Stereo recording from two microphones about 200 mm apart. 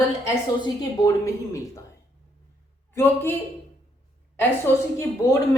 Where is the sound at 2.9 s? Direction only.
10° left (ahead or behind).